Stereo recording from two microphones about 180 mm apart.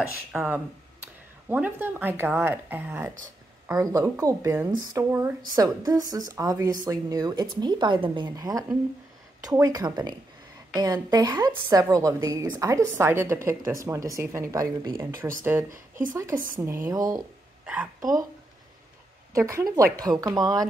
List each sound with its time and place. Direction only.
0.3 s a woman's voice: 5° right (ahead or behind); by 17.2 s 20° right (ahead or behind)
19.3 s a woman's voice: 15° right (ahead or behind)